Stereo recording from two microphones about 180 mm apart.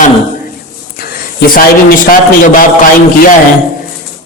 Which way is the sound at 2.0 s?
50° left (ahead or behind).